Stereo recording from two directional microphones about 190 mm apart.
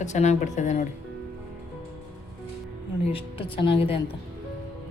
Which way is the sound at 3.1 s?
30° left (ahead or behind).